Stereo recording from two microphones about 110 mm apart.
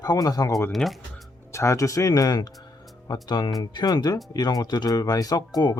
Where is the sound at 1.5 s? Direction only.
25° left (ahead or behind).